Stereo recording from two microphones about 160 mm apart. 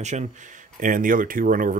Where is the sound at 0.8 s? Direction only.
55° right (ahead or behind).